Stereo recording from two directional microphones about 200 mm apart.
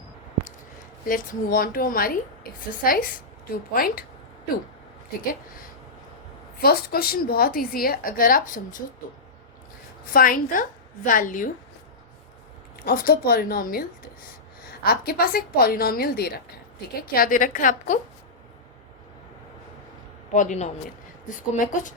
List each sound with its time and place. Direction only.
1.0 s a woman's voice: 45° left (ahead or behind)
6.6 s a woman's voice: 50° left (ahead or behind)
10.1 s a woman's voice: 45° left (ahead or behind)
12.7 s a woman's voice: 50° left (ahead or behind)
20.3 s a woman's voice: 35° left (ahead or behind)